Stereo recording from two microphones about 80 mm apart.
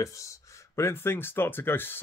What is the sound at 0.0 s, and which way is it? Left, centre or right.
Speech, left.